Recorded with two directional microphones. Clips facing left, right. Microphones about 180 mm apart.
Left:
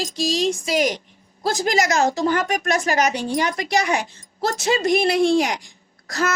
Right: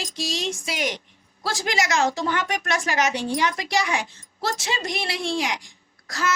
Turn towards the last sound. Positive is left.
turn(degrees=45)  # may be behind; listen again after turning